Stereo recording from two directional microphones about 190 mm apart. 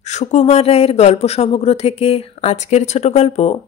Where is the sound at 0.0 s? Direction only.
40° left (ahead or behind).